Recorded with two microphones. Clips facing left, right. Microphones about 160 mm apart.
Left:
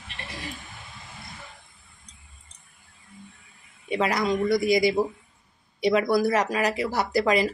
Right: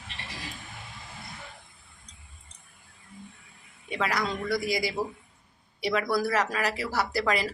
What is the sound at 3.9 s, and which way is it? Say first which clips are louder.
Speech: left 5 dB; 20° left (ahead or behind).